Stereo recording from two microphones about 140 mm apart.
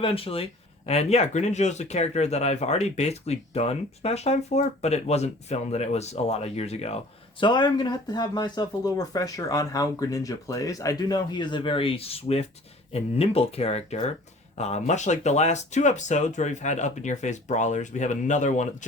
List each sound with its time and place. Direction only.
0.0 s speech: 40° left (ahead or behind); by 18.9 s 60° left (ahead or behind)